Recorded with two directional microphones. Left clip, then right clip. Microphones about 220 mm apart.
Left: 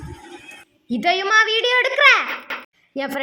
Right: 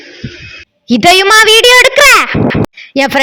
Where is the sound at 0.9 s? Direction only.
40° right (ahead or behind).